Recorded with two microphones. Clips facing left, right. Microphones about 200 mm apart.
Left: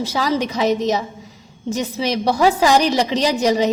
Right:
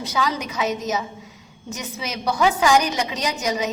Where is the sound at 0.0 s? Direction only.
30° left (ahead or behind).